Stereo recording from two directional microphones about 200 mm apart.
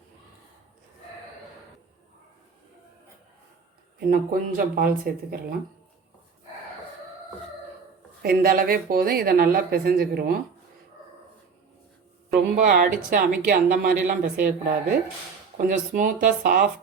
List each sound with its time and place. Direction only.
4.0 s speech: 45° right (ahead or behind)
8.2 s speech: 50° right (ahead or behind)
12.5 s speech: 40° right (ahead or behind)
15.5 s speech: 40° right (ahead or behind)